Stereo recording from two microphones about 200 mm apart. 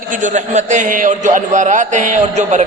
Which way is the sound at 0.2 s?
35° right (ahead or behind).